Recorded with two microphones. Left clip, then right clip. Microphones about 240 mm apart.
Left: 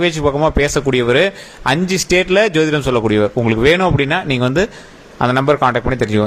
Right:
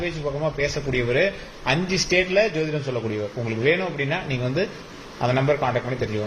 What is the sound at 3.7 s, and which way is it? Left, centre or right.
A man's voice, left.